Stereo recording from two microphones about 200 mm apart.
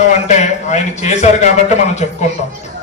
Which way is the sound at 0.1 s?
35° left (ahead or behind).